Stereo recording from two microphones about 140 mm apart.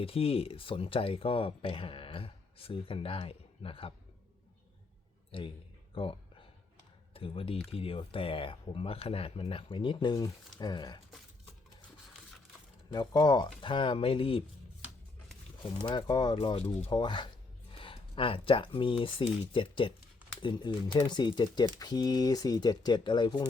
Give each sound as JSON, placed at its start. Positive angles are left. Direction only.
{"t": 0.0, "sound": "speech", "side_deg": 45}
{"t": 5.3, "sound": "speech", "side_deg": 40}
{"t": 12.9, "sound": "speech", "side_deg": 30}
{"t": 15.8, "sound": "speech", "side_deg": 35}